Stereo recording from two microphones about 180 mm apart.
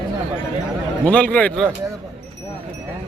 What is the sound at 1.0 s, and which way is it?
Speech, 5° left (ahead or behind).